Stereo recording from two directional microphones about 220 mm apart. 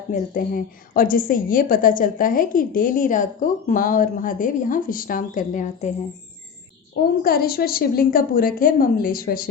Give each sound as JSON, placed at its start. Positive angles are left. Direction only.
{"t": 0.1, "sound": "a woman's voice", "side_deg": 40}
{"t": 7.2, "sound": "a woman's voice", "side_deg": 45}